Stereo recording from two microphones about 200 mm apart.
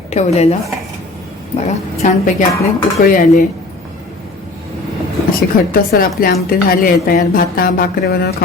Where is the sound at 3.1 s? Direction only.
40° left (ahead or behind).